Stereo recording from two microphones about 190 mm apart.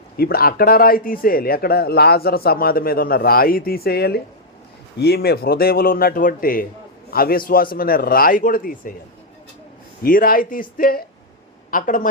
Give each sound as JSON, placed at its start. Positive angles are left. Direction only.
{"t": 0.2, "sound": "speech", "side_deg": 50}
{"t": 10.0, "sound": "speech", "side_deg": 50}